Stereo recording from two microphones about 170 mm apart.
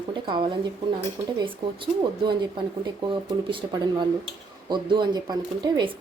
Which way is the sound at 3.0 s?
30° right (ahead or behind).